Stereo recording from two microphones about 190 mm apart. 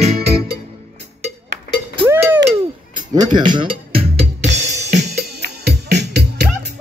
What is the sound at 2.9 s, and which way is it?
Music, 20° right (ahead or behind).